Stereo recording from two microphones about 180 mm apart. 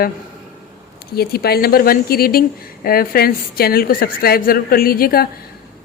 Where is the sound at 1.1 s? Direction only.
60° left (ahead or behind).